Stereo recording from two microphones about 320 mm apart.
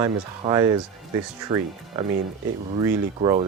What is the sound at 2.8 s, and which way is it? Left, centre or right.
Speech, centre.